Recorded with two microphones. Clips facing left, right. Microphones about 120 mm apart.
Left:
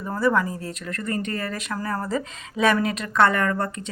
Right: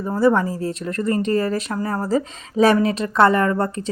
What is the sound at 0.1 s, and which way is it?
Speech, 30° right (ahead or behind).